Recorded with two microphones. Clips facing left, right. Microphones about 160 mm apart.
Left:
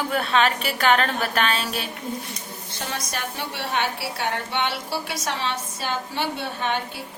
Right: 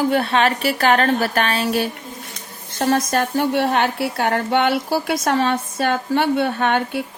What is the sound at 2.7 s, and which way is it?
A woman's voice, 50° right (ahead or behind).